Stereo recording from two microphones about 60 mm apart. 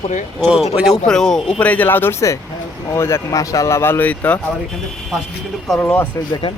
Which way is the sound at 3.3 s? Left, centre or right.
Left.